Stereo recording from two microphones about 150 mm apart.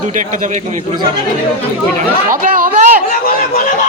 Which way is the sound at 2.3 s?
65° right (ahead or behind).